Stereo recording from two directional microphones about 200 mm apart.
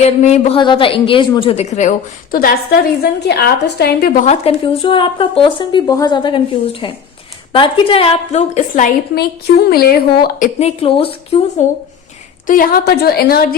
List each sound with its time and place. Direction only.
0.0 s a woman's voice: 35° left (ahead or behind); by 4.2 s 50° left (ahead or behind)
4.3 s a woman's voice: 25° left (ahead or behind); by 10.5 s 50° left (ahead or behind)
10.6 s speech: 30° left (ahead or behind)
12.5 s a woman's voice: 45° left (ahead or behind)